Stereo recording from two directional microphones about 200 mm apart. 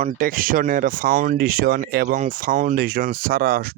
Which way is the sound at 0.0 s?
45° right (ahead or behind).